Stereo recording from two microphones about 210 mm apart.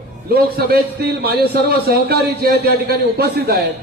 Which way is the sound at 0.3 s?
45° right (ahead or behind).